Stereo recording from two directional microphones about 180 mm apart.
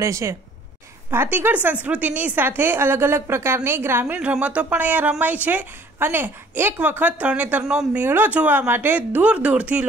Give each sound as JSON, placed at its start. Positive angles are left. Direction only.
{"t": 0.0, "sound": "a woman's voice", "side_deg": -15}